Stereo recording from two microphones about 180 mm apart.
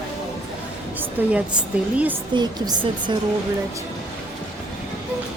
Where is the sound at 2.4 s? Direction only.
25° right (ahead or behind).